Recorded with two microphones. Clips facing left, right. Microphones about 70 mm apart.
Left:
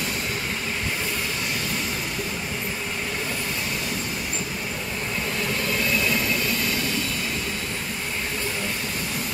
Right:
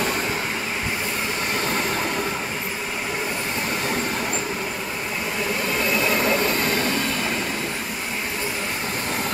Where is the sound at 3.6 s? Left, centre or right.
Right.